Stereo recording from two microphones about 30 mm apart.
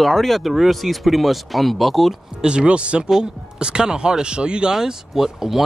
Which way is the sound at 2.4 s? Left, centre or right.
Right.